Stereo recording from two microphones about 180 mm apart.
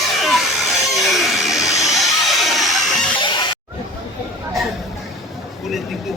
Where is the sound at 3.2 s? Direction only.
25° left (ahead or behind).